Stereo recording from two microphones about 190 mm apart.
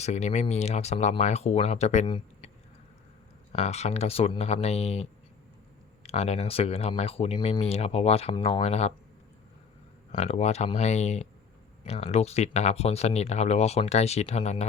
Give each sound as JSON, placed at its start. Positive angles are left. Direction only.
{"t": 0.0, "sound": "speech", "side_deg": 35}
{"t": 3.5, "sound": "speech", "side_deg": 35}
{"t": 10.1, "sound": "speech", "side_deg": 35}